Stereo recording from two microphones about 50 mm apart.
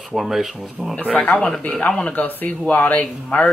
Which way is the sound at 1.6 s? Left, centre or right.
Left.